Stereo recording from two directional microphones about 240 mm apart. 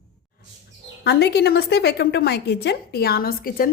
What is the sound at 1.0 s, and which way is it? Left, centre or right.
A woman's voice, left.